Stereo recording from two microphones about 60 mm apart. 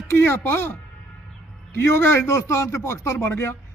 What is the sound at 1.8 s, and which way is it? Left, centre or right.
Speech, left.